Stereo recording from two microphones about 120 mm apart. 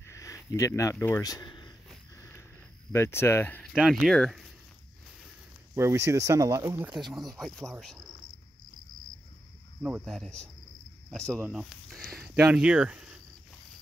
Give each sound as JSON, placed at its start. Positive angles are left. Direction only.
{"t": 0.0, "sound": "a sound", "side_deg": 25}
{"t": 0.9, "sound": "speech", "side_deg": 15}
{"t": 1.2, "sound": "speech", "side_deg": 35}
{"t": 2.1, "sound": "a sound", "side_deg": 20}
{"t": 2.9, "sound": "speech", "side_deg": 20}
{"t": 3.7, "sound": "speech", "side_deg": -5}
{"t": 5.8, "sound": "speech", "side_deg": -25}
{"t": 6.9, "sound": "speech", "side_deg": 0}
{"t": 10.0, "sound": "speech", "side_deg": 0}